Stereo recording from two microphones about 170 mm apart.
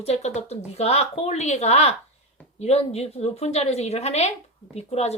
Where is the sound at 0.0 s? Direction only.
40° left (ahead or behind).